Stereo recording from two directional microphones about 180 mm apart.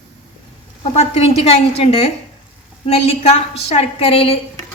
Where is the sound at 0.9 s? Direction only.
35° left (ahead or behind).